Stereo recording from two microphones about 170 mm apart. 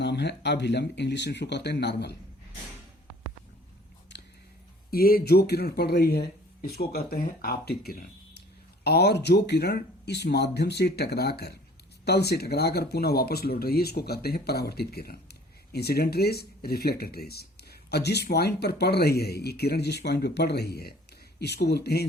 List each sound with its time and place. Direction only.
0.0 s speech: 85° left
4.9 s speech: 60° left (ahead or behind)
21.3 s speech: 80° left